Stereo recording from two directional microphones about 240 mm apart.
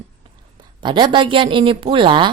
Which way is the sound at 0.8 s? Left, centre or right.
Centre.